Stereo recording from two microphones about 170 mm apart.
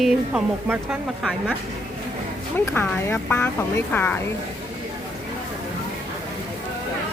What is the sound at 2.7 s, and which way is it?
Speech, 10° left (ahead or behind).